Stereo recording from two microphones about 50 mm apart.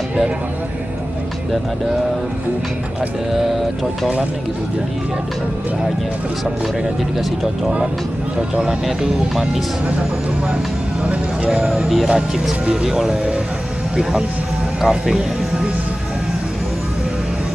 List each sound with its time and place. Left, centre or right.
7.2 s speech: centre
8.4 s speech: centre
8.8 s speech: centre
9.8 s speech: right
14.8 s speech: centre